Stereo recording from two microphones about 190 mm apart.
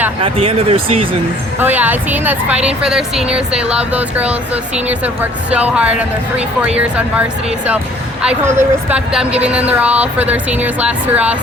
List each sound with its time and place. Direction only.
0.2 s speech: 30° right (ahead or behind)
1.5 s a woman's voice: 10° right (ahead or behind)